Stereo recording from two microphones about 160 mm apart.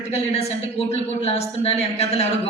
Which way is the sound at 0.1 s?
40° left (ahead or behind).